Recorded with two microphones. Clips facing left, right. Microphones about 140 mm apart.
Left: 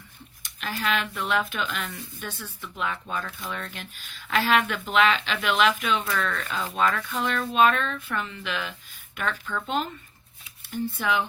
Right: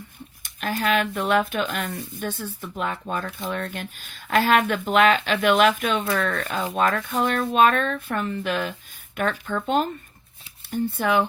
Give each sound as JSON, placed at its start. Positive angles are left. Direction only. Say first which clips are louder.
{"t": 0.4, "sound": "speech", "louder": "right 5 dB", "side_deg": -50}